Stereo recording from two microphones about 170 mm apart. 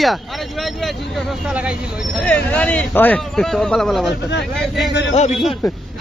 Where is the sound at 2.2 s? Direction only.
10° left (ahead or behind).